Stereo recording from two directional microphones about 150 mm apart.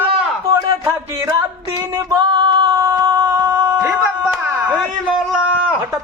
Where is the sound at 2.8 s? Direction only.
15° right (ahead or behind).